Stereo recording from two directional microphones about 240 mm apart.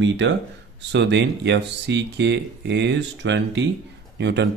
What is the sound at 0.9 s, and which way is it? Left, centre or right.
Speech, right.